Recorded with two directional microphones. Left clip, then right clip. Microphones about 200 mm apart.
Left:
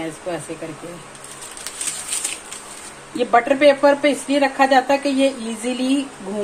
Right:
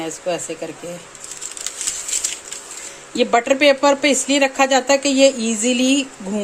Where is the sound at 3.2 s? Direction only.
55° right (ahead or behind).